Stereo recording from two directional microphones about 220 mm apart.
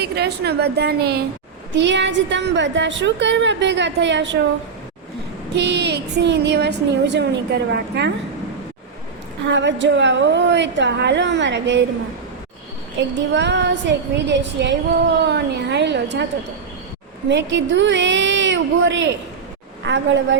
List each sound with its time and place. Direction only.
0.0 s a woman's voice: 50° right (ahead or behind)
5.5 s a woman's voice: 50° right (ahead or behind)
9.5 s a woman's voice: 55° right (ahead or behind)
13.0 s a woman's voice: 55° right (ahead or behind)
17.2 s a woman's voice: 55° right (ahead or behind)